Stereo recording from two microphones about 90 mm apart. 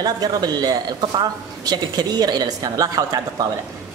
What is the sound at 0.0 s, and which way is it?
A woman's voice, 45° right (ahead or behind).